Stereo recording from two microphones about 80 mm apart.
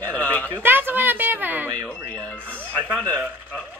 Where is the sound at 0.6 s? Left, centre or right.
Right.